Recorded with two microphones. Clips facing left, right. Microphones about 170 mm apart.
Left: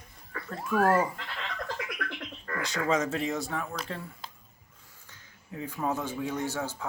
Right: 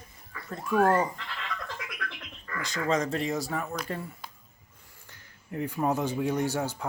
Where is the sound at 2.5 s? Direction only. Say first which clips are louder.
Left 2 dB; 55° left (ahead or behind).